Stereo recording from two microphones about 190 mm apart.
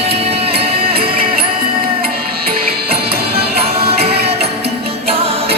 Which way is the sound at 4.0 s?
55° right (ahead or behind).